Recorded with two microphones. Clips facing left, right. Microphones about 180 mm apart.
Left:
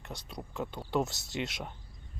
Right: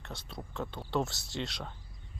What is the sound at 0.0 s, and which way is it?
Speech, 15° left (ahead or behind).